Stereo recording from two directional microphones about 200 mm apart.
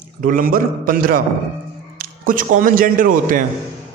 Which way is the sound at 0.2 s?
45° right (ahead or behind).